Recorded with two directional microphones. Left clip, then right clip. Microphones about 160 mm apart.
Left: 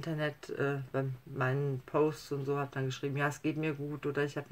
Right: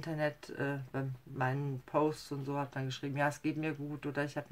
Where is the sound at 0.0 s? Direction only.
20° right (ahead or behind).